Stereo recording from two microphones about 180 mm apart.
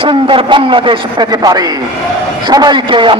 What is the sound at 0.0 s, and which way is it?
A man's voice, 30° right (ahead or behind).